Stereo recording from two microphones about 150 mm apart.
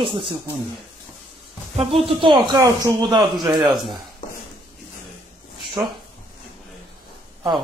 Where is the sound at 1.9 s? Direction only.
35° right (ahead or behind).